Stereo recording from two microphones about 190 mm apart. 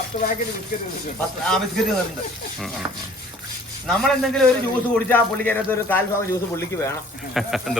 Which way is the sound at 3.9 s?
Centre (ahead or behind).